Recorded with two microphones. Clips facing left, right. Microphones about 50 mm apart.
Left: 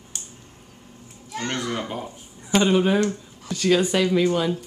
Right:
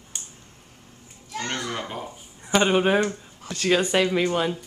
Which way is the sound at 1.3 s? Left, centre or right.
Centre.